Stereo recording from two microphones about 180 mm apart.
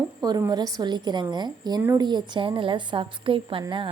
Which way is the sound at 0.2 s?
20° right (ahead or behind).